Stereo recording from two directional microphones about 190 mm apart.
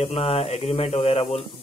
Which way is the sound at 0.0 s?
30° left (ahead or behind).